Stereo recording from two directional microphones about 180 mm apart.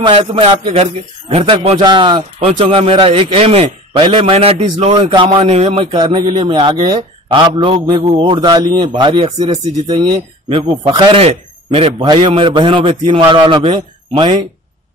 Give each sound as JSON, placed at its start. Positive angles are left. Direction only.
{"t": 0.0, "sound": "a man's voice", "side_deg": -30}
{"t": 11.2, "sound": "a man's voice", "side_deg": -35}